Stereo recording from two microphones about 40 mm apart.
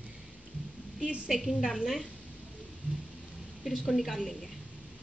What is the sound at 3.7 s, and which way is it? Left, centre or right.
Speech, centre.